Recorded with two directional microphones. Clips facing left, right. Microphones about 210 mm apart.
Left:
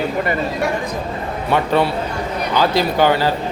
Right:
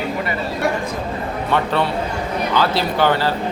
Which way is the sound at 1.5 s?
15° left (ahead or behind).